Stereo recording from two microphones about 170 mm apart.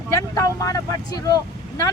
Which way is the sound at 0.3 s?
20° left (ahead or behind).